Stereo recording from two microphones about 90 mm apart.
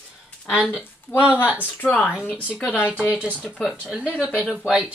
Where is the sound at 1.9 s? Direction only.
10° right (ahead or behind).